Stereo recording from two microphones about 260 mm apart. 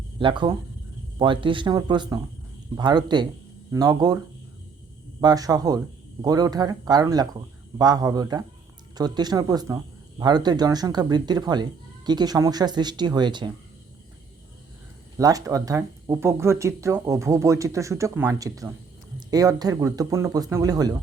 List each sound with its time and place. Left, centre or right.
0.2 s speech: centre
5.2 s speech: centre
15.2 s speech: centre